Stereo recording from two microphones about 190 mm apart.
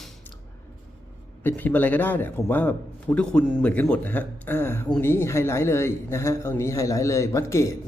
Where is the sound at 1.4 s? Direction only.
10° left (ahead or behind).